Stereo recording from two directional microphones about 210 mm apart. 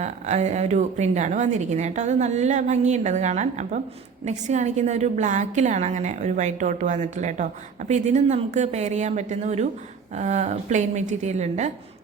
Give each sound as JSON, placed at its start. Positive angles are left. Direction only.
{"t": 0.0, "sound": "a woman's voice", "side_deg": -35}